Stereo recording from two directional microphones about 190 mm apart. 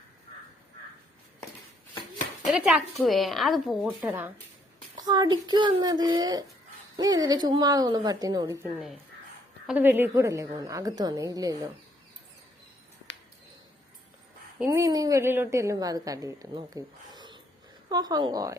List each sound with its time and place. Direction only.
2.5 s a woman's voice: 5° right (ahead or behind)
4.9 s speech: 20° right (ahead or behind)
9.6 s a woman's voice: 10° right (ahead or behind)
14.6 s a woman's voice: 15° right (ahead or behind)